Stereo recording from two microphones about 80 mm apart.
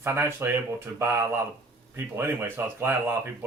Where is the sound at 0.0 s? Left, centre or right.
Right.